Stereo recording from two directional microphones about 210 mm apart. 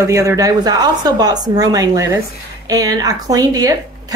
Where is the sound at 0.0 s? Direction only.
15° right (ahead or behind).